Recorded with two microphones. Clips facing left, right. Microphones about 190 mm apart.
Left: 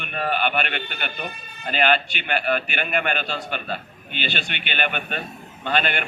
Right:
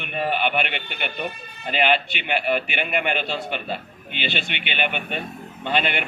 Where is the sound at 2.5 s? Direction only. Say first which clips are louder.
Even; 20° right (ahead or behind).